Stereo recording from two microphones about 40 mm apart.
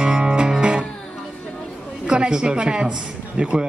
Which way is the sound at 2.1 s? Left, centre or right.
Right.